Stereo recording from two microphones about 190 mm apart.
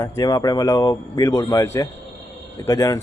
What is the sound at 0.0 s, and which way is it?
A man's voice, 20° left (ahead or behind).